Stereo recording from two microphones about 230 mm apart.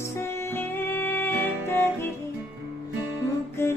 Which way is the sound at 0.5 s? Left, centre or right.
Centre.